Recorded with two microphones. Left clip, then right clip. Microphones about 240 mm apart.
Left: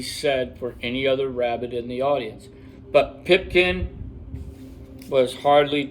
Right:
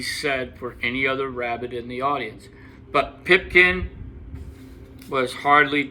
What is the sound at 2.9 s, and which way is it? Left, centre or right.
Speech, centre.